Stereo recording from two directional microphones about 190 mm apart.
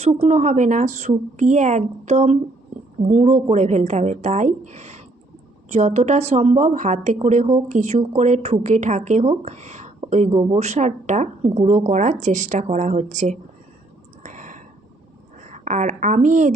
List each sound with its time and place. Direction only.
0.0 s a woman's voice: 30° right (ahead or behind)
14.3 s a sound: 40° right (ahead or behind)
15.4 s a woman's voice: 40° right (ahead or behind)